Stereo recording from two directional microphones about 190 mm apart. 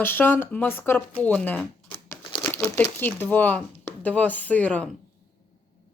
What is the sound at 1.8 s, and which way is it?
Crumpling, 25° left (ahead or behind).